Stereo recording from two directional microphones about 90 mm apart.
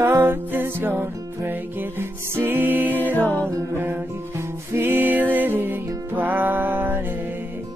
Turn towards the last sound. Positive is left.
turn(degrees=-25)  # may be behind; listen again after turning